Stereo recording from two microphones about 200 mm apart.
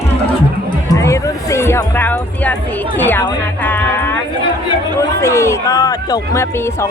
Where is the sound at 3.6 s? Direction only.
10° left (ahead or behind).